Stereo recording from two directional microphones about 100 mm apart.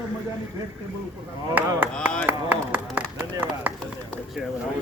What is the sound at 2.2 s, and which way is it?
Speech, 20° right (ahead or behind).